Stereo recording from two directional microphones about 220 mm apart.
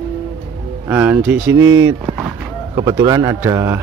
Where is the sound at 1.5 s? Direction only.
60° right (ahead or behind).